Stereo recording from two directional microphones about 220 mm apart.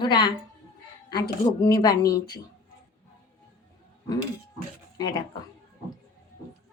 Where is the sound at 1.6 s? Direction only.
15° left (ahead or behind).